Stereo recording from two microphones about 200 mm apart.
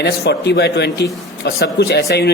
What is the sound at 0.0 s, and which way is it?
A man's voice, 55° left (ahead or behind).